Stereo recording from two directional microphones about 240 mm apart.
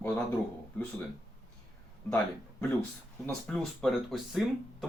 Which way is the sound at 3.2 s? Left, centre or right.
Centre.